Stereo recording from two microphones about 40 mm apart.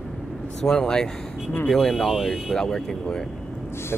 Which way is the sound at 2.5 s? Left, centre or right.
Centre.